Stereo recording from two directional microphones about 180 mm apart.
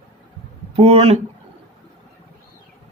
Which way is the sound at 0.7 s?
30° right (ahead or behind).